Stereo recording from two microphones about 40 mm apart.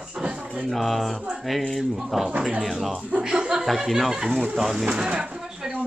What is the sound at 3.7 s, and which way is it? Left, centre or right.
Speech, centre.